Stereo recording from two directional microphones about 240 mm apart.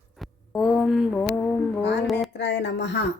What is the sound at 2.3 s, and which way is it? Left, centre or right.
Speech, left.